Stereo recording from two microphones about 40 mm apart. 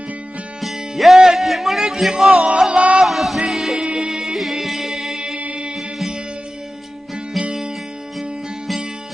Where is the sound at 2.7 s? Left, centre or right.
Right.